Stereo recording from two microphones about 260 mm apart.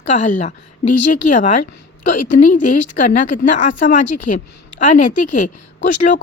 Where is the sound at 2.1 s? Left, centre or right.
Left.